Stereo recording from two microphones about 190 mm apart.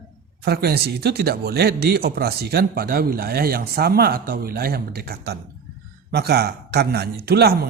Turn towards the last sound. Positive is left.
turn(degrees=-55)  # may be behind; listen again after turning